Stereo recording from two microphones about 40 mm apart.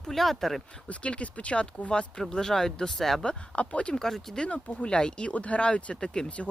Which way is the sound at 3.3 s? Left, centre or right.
Left.